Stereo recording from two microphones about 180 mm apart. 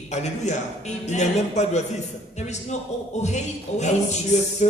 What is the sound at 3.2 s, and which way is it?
Speech, 40° left (ahead or behind).